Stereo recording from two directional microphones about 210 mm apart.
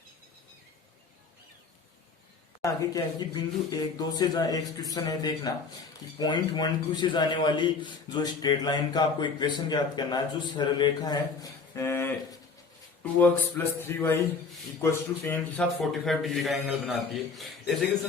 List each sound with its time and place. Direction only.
2.6 s a man's voice: 20° left (ahead or behind); by 17.8 s centre (ahead or behind)